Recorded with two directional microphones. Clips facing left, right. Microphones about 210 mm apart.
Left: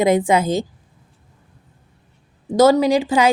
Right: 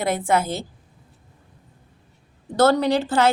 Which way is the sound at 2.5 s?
10° left (ahead or behind).